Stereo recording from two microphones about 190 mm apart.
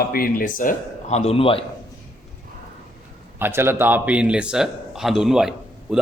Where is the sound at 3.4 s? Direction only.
10° right (ahead or behind).